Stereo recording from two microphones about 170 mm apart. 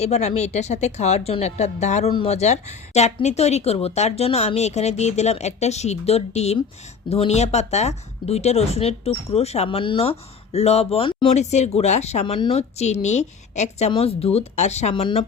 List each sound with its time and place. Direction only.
0.0 s speech: 40° left (ahead or behind)
11.3 s speech: 40° left (ahead or behind)